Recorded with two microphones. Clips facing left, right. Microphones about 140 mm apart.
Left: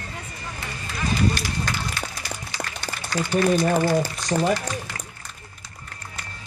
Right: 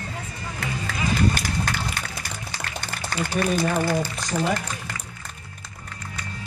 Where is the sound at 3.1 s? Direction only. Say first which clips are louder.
Left 2 dB; 50° right (ahead or behind).